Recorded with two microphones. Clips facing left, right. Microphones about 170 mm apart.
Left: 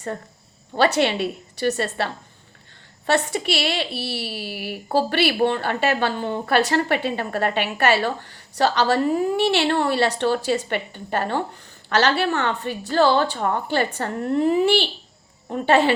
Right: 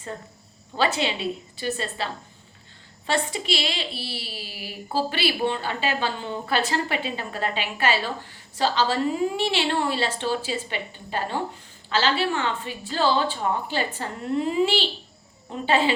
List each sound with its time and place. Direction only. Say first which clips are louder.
1.0 s a woman's voice: left 5 dB; 70° left (ahead or behind)
3.1 s a woman's voice: left 4 dB; 70° left (ahead or behind)
11.9 s a woman's voice: left 4 dB; 70° left (ahead or behind)